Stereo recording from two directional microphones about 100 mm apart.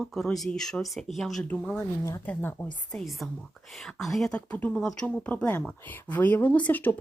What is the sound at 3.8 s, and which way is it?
Speech, centre (ahead or behind).